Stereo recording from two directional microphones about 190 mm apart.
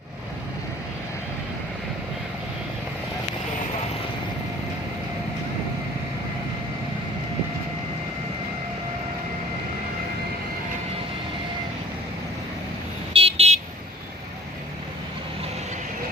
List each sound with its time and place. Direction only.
13.1 s vehicle: 30° right (ahead or behind)